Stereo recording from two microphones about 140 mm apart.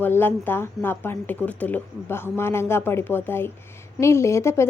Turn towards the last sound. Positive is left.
turn(degrees=20)  # may be behind; listen again after turning